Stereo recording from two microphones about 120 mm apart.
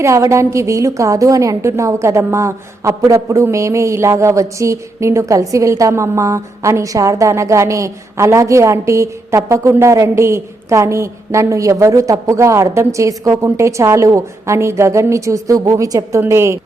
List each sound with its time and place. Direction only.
0.0 s a woman's voice: 25° right (ahead or behind)